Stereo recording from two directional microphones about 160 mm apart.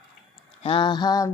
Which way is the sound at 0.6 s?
35° left (ahead or behind).